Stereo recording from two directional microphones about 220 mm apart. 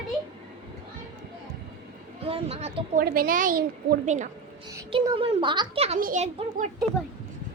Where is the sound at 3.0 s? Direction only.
40° right (ahead or behind).